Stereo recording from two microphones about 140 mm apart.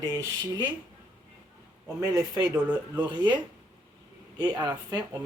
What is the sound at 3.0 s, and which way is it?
Speech, 35° right (ahead or behind).